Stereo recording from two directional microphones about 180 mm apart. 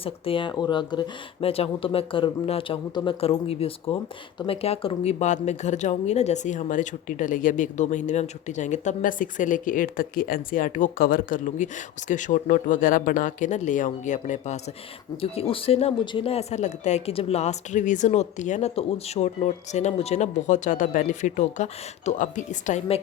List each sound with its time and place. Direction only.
0.0 s speech: 30° left (ahead or behind)
15.2 s speech: 30° left (ahead or behind)